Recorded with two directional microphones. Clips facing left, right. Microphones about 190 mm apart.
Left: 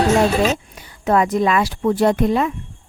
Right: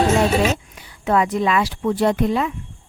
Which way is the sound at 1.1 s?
45° left (ahead or behind).